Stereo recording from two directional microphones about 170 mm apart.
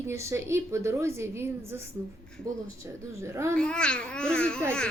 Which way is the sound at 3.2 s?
15° right (ahead or behind).